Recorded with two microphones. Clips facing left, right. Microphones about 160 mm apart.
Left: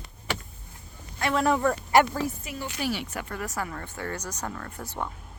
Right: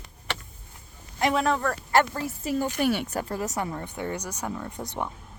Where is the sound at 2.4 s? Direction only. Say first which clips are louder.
Right 7 dB; 50° right (ahead or behind).